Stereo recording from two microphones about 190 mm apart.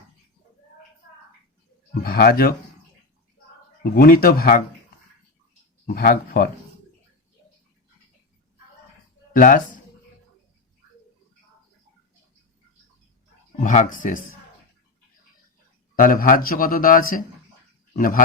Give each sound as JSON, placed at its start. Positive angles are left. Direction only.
{"t": 2.0, "sound": "a man's voice", "side_deg": 50}
{"t": 3.9, "sound": "a man's voice", "side_deg": 50}
{"t": 5.8, "sound": "a man's voice", "side_deg": 50}
{"t": 9.3, "sound": "speech", "side_deg": 45}
{"t": 13.6, "sound": "a man's voice", "side_deg": 45}
{"t": 16.0, "sound": "a man's voice", "side_deg": 45}